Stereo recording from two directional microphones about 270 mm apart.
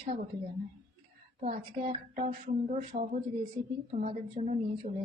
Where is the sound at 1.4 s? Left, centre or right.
Centre.